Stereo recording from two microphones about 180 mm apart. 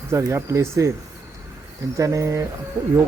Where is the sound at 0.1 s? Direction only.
15° right (ahead or behind).